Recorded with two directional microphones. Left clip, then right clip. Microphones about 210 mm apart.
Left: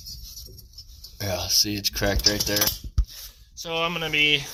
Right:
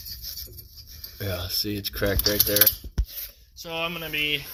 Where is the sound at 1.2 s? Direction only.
Centre (ahead or behind).